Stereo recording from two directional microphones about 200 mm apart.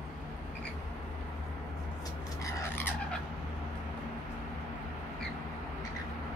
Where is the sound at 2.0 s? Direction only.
15° left (ahead or behind).